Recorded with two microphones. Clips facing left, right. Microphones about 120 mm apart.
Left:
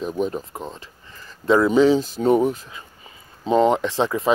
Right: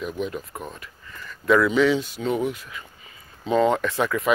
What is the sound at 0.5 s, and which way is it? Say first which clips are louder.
Speech: left 2 dB; 25° left (ahead or behind).